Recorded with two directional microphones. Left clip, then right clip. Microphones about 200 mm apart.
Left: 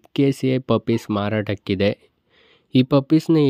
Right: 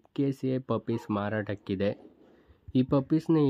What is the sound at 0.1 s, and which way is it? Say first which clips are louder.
Speech: left 10 dB; 40° left (ahead or behind).